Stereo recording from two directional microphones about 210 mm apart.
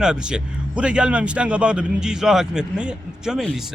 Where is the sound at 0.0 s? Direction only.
5° right (ahead or behind).